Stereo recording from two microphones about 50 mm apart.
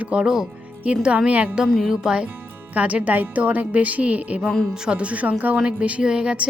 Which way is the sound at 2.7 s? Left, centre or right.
Right.